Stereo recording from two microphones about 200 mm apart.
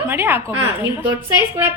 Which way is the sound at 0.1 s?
10° right (ahead or behind).